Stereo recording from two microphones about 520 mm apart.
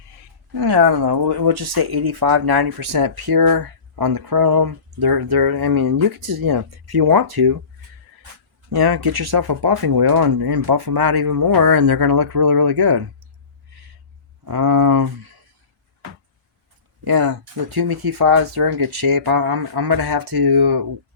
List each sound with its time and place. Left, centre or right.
0.5 s speech: right
8.7 s speech: right
14.4 s speech: right
17.0 s speech: right